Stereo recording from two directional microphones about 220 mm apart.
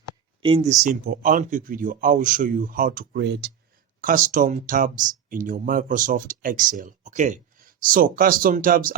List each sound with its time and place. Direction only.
0.4 s speech: 25° right (ahead or behind)
0.9 s speech: 40° right (ahead or behind)
4.0 s speech: 40° right (ahead or behind)